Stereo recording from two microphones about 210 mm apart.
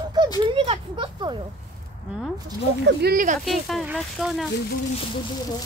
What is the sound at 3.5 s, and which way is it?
Speech, centre (ahead or behind).